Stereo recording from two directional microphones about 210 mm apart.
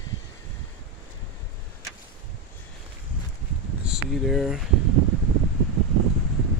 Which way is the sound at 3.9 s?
Centre (ahead or behind).